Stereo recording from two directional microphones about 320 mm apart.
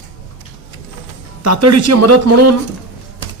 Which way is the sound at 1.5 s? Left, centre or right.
Right.